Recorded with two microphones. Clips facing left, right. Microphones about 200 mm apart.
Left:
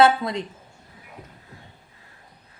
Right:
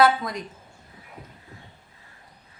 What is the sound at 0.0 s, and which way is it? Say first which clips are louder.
Speech: left 2 dB; 25° left (ahead or behind).